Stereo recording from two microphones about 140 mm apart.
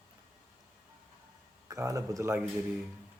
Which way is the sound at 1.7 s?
25° right (ahead or behind).